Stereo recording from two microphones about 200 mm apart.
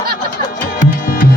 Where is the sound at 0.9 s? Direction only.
45° left (ahead or behind).